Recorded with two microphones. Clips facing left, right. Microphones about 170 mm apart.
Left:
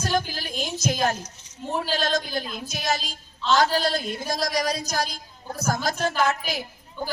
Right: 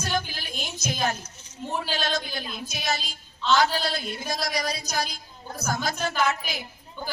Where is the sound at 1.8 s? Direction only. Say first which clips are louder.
Left 5 dB; 45° left (ahead or behind).